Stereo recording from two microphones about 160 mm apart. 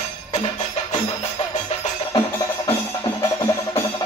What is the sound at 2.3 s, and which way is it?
Music, 30° left (ahead or behind).